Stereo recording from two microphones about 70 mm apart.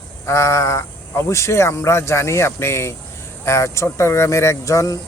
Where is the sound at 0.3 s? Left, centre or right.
Left.